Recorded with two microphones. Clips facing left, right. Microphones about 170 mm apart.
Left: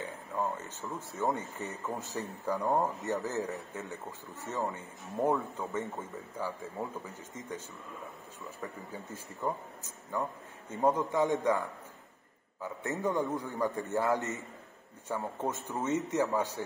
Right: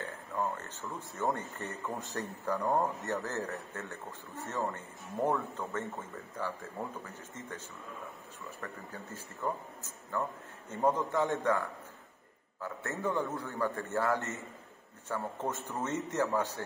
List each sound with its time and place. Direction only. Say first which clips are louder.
0.0 s a sound: left 1 dB; 10° left (ahead or behind)
1.2 s speech: left 1 dB; 10° left (ahead or behind)
12.6 s speech: left 2 dB; 15° left (ahead or behind)